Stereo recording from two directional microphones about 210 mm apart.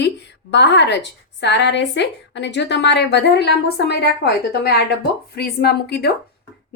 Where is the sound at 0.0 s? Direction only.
55° left (ahead or behind).